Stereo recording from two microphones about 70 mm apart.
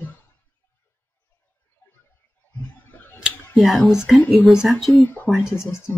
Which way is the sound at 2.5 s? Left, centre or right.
Left.